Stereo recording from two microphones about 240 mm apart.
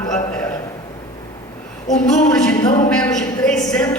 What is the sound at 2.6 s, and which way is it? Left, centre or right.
Speech, centre.